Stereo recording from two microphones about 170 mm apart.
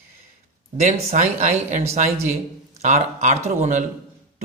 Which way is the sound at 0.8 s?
45° right (ahead or behind).